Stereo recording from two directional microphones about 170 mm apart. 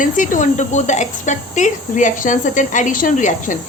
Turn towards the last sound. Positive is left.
turn(degrees=50)  # may be behind; listen again after turning